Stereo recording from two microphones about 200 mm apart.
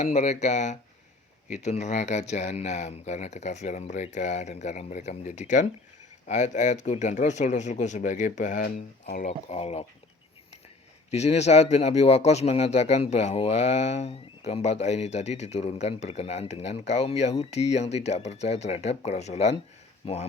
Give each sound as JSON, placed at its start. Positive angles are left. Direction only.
{"t": 0.0, "sound": "speech", "side_deg": 35}
{"t": 11.1, "sound": "speech", "side_deg": 35}